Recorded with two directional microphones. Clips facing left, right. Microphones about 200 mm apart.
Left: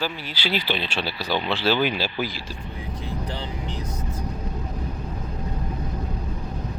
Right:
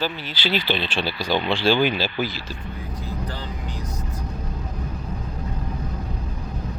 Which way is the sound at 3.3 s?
25° left (ahead or behind).